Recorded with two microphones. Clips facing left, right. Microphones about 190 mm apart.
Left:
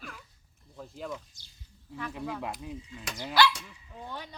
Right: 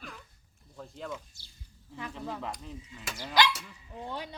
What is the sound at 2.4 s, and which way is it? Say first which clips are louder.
Mechanisms: left 2 dB; 10° left (ahead or behind).